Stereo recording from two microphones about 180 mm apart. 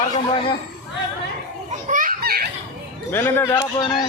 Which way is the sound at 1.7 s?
45° right (ahead or behind).